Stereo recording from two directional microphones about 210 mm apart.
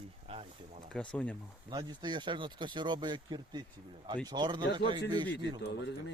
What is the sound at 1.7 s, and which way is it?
Speech, 20° right (ahead or behind).